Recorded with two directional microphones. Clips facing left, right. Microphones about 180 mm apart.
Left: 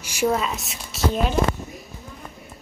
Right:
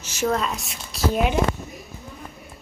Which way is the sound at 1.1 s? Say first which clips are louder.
Right 4 dB; 10° right (ahead or behind).